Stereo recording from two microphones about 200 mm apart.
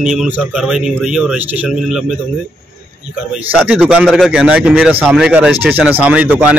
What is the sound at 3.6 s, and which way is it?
A man's voice, 5° right (ahead or behind).